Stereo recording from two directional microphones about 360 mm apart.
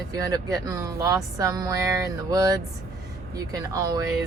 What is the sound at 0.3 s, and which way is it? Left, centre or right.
Speech, centre.